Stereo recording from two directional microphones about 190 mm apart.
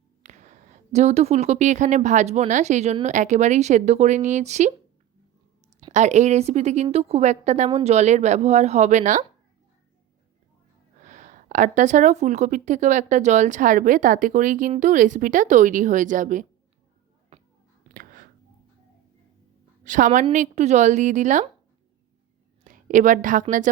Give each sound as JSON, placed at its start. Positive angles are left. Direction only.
{"t": 0.2, "sound": "speech", "side_deg": -40}
{"t": 5.9, "sound": "speech", "side_deg": -35}
{"t": 11.0, "sound": "speech", "side_deg": -40}
{"t": 17.9, "sound": "whispering", "side_deg": -45}
{"t": 19.8, "sound": "a woman's voice", "side_deg": -40}
{"t": 22.6, "sound": "a woman's voice", "side_deg": -40}